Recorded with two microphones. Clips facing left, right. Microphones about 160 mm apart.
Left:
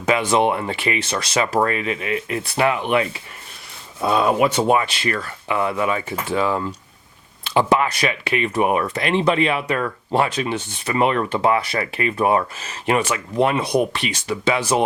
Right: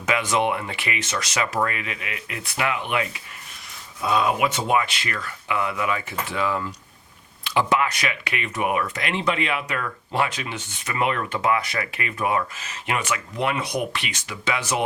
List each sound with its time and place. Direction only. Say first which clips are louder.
0.0 s speech: left 5 dB; 30° left (ahead or behind)